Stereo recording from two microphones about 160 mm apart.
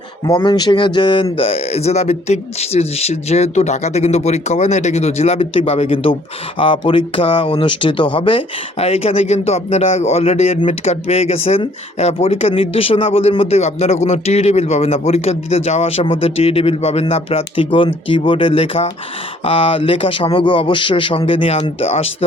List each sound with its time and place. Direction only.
0.3 s speech: 25° left (ahead or behind)